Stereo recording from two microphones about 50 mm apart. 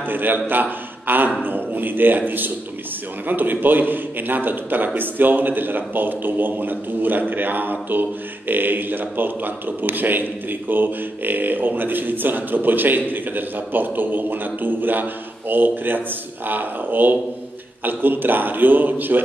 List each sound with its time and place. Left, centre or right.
0.0 s a man's voice: right